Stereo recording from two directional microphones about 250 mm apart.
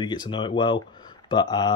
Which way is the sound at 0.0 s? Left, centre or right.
Centre.